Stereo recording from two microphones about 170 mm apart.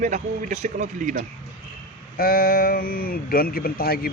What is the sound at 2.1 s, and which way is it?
Speech, 60° left (ahead or behind).